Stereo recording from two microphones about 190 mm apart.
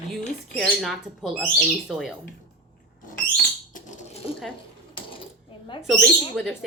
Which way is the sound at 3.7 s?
40° left (ahead or behind).